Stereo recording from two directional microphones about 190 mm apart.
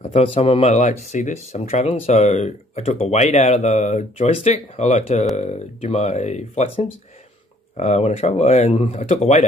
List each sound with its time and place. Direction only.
0.0 s speech: 30° left (ahead or behind)